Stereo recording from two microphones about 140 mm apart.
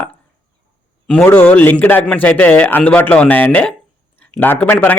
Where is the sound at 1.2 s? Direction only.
15° left (ahead or behind).